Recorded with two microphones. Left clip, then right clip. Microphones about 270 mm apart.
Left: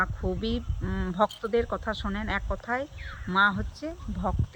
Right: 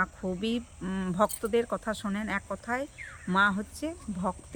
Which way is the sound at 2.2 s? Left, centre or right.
Right.